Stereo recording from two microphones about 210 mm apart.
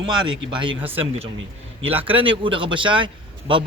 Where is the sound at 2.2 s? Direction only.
25° right (ahead or behind).